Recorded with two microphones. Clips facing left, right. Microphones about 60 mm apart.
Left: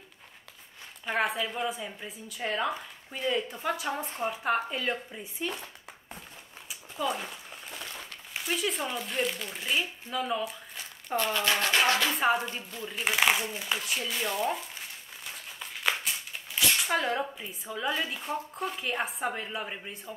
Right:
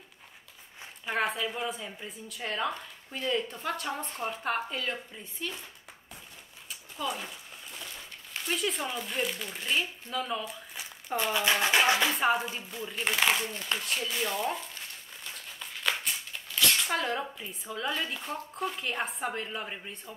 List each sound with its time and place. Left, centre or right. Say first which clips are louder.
1.0 s speech: left 1 dB; centre
6.7 s a sound: left 3 dB; centre
8.3 s speech: left 1 dB; centre
10.8 s crumpling: left 1 dB; centre
11.6 s music: right 1 dB; centre
12.1 s speech: left 1 dB; centre
15.2 s a sound: left 1 dB; centre
16.5 s speech: left 1 dB; centre